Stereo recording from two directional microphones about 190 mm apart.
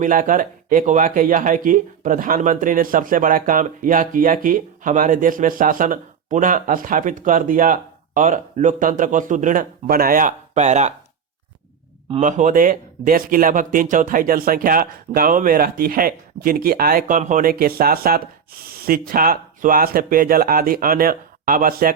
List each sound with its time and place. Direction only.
0.0 s speech: 45° right (ahead or behind)
12.1 s speech: 40° right (ahead or behind)